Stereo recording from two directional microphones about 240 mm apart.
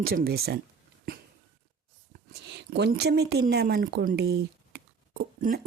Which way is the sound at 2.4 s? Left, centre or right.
Right.